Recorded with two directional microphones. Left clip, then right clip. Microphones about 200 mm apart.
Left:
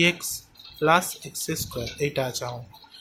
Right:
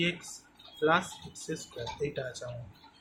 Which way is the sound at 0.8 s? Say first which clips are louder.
Left 7 dB; 55° left (ahead or behind).